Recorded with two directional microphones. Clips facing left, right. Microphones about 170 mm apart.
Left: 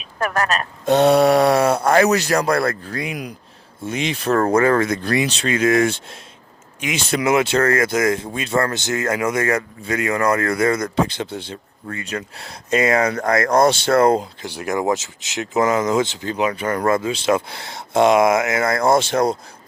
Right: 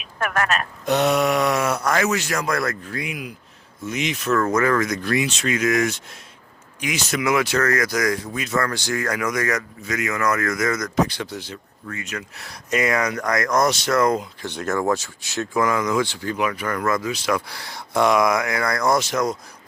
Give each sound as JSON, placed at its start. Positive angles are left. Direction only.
{"t": 0.2, "sound": "speech", "side_deg": 35}
{"t": 14.4, "sound": "speech", "side_deg": 10}